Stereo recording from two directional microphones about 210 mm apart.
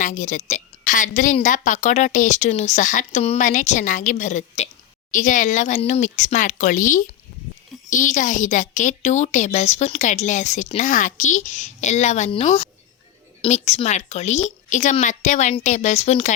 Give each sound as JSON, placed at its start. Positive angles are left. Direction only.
{"t": 0.0, "sound": "a woman's voice", "side_deg": 35}